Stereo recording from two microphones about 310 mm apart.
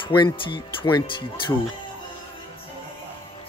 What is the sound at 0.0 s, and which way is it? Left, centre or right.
Speech, centre.